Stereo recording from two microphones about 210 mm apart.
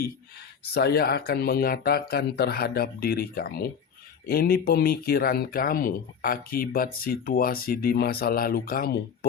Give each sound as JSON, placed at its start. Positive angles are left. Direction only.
{"t": 0.6, "sound": "speech", "side_deg": 50}